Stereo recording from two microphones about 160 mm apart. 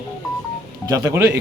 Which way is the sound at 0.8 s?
20° right (ahead or behind).